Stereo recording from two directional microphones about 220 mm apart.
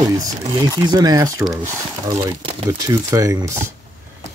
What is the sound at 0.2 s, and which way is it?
Speech, 15° right (ahead or behind).